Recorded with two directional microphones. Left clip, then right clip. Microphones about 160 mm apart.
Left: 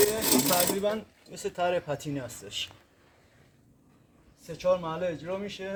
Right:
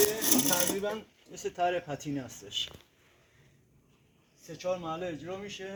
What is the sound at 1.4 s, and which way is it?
Speech, 20° right (ahead or behind).